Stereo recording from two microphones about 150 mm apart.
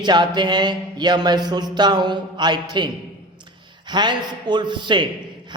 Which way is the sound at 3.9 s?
30° right (ahead or behind).